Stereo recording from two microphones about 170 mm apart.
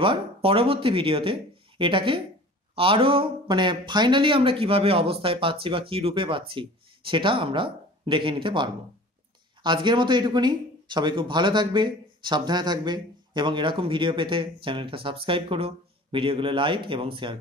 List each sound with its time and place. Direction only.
0.0 s speech: 30° right (ahead or behind)